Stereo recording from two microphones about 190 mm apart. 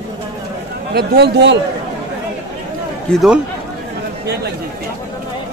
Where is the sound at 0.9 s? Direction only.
55° right (ahead or behind).